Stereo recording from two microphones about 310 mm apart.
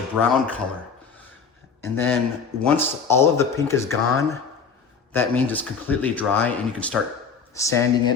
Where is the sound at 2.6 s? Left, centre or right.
Centre.